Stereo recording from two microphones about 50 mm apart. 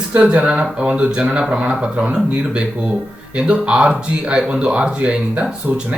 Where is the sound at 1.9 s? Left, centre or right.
Right.